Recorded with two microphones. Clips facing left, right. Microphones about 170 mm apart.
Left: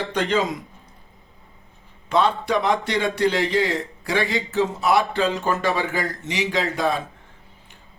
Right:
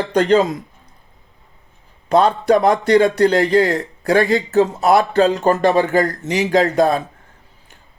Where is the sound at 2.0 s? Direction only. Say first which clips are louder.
Right 6 dB; 40° right (ahead or behind).